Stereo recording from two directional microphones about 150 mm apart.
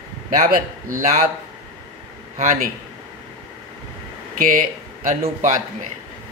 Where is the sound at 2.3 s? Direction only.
65° right (ahead or behind).